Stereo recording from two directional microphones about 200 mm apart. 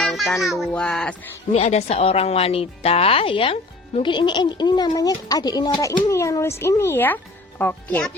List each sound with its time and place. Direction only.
0.0 s music: centre (ahead or behind)
0.3 s a child's voice: centre (ahead or behind)
1.5 s a woman's voice: 30° left (ahead or behind); by 8.1 s 10° left (ahead or behind)